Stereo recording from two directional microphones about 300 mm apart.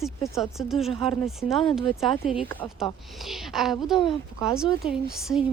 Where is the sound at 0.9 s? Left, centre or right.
Centre.